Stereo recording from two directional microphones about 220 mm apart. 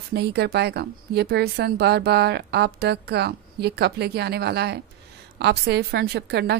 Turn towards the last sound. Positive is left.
turn(degrees=-50)  # may be behind; listen again after turning